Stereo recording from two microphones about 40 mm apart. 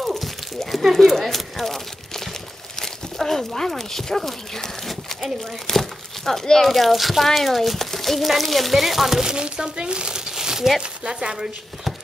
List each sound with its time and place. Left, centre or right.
0.0 s a sound: centre
0.9 s speech: centre
6.7 s speech: centre
9.3 s speech: right
11.3 s speech: centre